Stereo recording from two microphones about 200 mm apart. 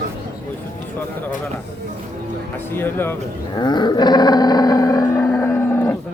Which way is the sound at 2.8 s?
10° left (ahead or behind).